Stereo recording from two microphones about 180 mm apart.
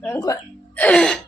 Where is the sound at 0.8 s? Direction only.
5° left (ahead or behind).